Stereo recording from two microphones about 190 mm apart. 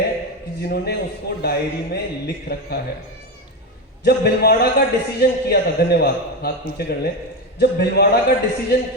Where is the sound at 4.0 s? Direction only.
55° left (ahead or behind).